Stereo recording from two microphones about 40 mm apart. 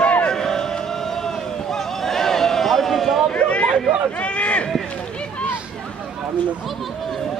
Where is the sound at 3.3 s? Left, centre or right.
Left.